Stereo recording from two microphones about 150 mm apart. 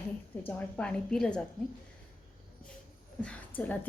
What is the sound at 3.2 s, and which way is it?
Speech, 10° left (ahead or behind).